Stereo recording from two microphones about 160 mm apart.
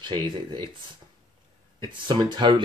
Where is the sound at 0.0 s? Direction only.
30° right (ahead or behind).